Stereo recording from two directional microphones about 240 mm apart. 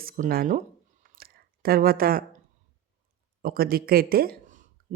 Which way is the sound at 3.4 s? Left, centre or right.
Right.